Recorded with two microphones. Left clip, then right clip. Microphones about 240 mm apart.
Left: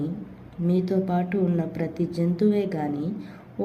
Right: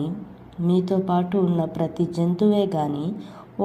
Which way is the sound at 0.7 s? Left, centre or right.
Centre.